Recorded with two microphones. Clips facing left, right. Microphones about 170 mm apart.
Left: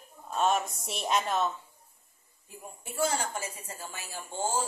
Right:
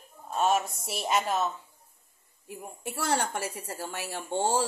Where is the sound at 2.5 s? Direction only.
70° right (ahead or behind).